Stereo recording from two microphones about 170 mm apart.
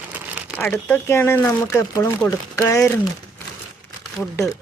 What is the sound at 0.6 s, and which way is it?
Speech, 15° left (ahead or behind).